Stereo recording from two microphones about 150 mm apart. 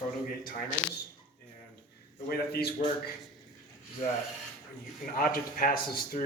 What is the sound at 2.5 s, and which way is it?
Speech, 90° left.